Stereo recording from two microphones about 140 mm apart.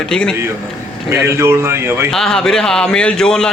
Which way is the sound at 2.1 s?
5° left (ahead or behind).